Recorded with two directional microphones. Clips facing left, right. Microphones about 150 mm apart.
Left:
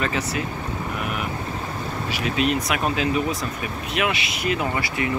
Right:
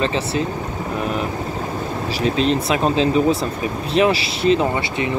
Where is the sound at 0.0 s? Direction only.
30° right (ahead or behind).